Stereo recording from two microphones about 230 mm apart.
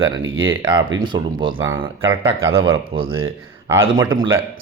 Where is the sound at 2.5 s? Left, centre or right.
Right.